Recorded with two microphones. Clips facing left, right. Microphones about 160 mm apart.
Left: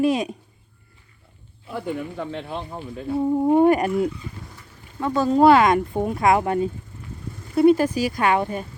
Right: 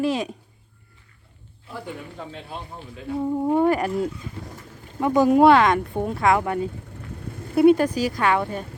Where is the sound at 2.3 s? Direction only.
55° left (ahead or behind).